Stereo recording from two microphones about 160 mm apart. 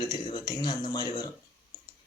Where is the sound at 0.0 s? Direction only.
25° left (ahead or behind).